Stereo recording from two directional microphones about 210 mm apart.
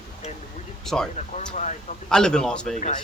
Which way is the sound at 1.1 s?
35° left (ahead or behind).